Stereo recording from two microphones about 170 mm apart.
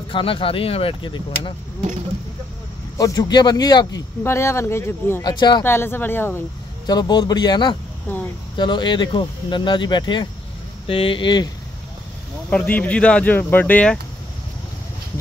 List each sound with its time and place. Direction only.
0.1 s speech: 30° left (ahead or behind)
3.0 s speech: 20° left (ahead or behind)
5.2 s speech: 25° left (ahead or behind)
5.6 s speech: 15° left (ahead or behind)
6.9 s speech: 25° left (ahead or behind)
8.1 s speech: 10° left (ahead or behind)
8.5 s speech: 25° left (ahead or behind)
12.4 s speech: 10° left (ahead or behind)